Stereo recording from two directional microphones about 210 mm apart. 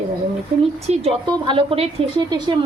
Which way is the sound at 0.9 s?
30° right (ahead or behind).